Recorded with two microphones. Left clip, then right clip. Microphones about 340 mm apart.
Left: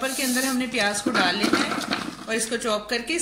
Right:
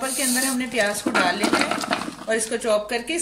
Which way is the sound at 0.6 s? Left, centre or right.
Right.